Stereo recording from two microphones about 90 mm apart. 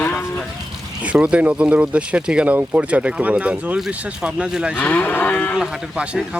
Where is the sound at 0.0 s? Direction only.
20° left (ahead or behind).